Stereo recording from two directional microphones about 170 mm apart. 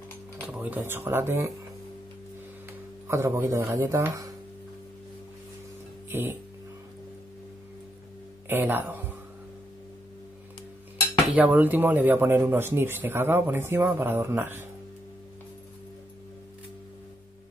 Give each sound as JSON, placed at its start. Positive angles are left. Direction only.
{"t": 0.5, "sound": "speech", "side_deg": -10}
{"t": 3.1, "sound": "speech", "side_deg": -15}
{"t": 6.0, "sound": "speech", "side_deg": -15}
{"t": 8.5, "sound": "speech", "side_deg": -10}
{"t": 11.2, "sound": "speech", "side_deg": -5}